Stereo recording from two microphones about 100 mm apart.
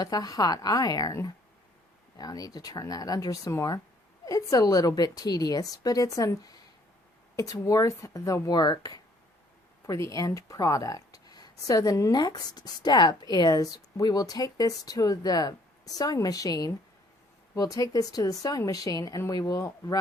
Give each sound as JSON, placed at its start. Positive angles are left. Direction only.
{"t": 0.0, "sound": "speech", "side_deg": 40}